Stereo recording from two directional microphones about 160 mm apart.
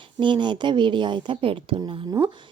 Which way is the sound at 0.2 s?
30° right (ahead or behind).